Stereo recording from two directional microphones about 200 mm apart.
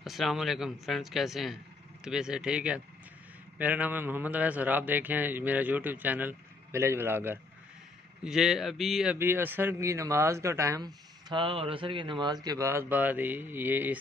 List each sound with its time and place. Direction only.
0.0 s a man's voice: centre (ahead or behind)
11.2 s a man's voice: 25° right (ahead or behind); by 13.9 s 10° right (ahead or behind)